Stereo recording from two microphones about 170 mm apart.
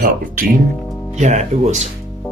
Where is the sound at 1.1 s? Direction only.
45° right (ahead or behind).